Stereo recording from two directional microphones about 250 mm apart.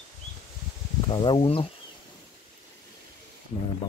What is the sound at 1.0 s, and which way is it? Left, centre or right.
Speech, centre.